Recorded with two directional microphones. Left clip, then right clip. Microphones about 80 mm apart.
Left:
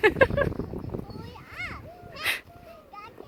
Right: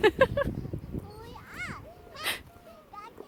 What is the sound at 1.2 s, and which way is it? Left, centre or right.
Children playing, right.